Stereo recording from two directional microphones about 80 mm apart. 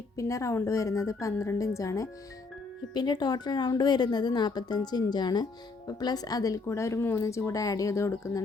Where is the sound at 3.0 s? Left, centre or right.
Left.